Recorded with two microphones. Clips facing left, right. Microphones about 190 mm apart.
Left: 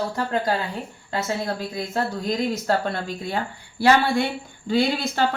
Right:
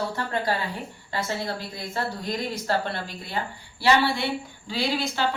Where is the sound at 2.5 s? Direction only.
50° left (ahead or behind).